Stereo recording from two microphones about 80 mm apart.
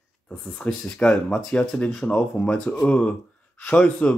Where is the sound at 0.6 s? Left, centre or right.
Centre.